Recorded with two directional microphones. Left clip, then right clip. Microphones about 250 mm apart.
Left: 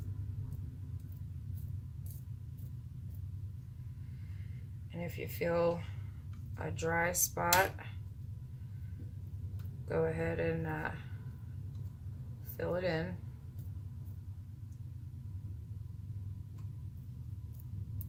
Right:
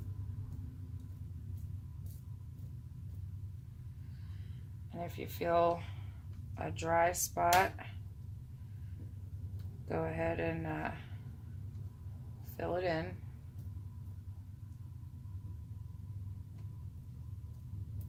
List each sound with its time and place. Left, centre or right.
5.0 s speech: right
9.9 s speech: right
12.5 s speech: right